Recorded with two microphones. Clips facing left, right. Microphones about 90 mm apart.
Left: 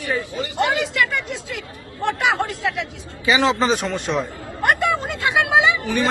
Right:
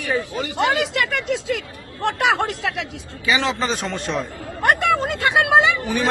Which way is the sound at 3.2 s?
25° left (ahead or behind).